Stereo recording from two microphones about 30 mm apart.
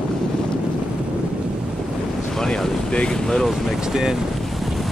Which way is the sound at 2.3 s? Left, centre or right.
Left.